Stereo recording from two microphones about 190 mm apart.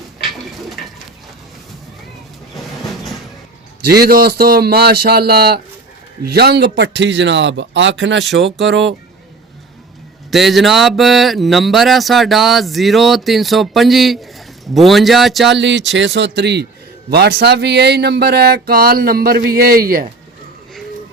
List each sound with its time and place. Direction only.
2.9 s a sound: centre (ahead or behind)
3.8 s speech: 55° right (ahead or behind); by 9.0 s 70° right (ahead or behind)
10.3 s speech: centre (ahead or behind)
15.5 s speech: 70° right (ahead or behind); by 20.1 s 50° right (ahead or behind)